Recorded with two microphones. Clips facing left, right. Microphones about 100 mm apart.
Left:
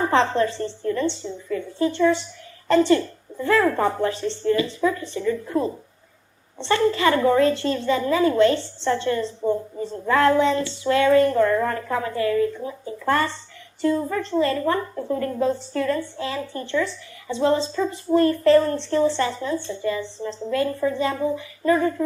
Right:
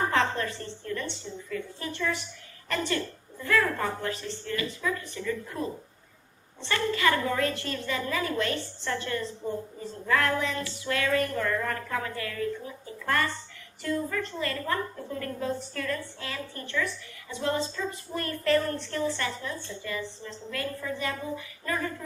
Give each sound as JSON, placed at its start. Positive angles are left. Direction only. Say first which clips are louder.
{"t": 0.0, "sound": "a woman's voice", "louder": "left 7 dB", "side_deg": 30}